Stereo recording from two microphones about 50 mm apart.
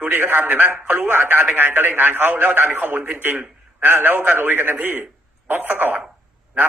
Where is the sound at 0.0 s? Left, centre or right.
Right.